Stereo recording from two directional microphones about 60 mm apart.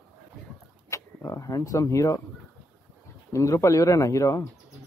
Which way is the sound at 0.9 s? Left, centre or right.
Left.